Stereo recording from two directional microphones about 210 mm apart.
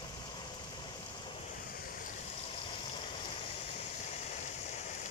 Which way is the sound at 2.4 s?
25° left (ahead or behind).